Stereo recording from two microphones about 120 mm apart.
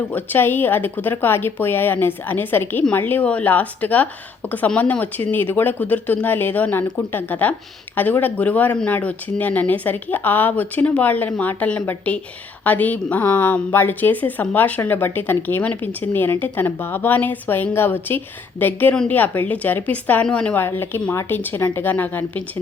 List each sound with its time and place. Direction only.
0.1 s a woman's voice: 15° left (ahead or behind)